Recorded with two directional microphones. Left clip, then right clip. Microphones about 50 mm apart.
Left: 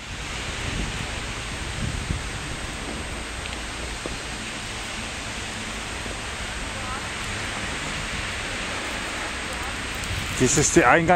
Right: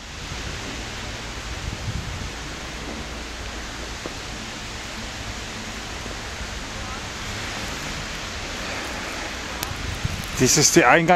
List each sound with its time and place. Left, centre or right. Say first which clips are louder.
10.4 s speech: right 3 dB; right
10.8 s speech: right 1 dB; right